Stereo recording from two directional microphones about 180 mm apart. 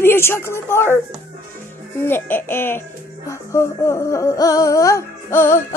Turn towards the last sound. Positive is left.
turn(degrees=15)  # may be behind; listen again after turning